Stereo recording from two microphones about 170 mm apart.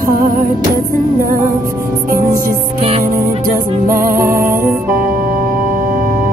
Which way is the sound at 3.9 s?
55° right (ahead or behind).